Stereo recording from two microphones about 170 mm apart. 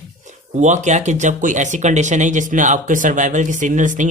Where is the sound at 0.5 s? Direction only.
45° right (ahead or behind).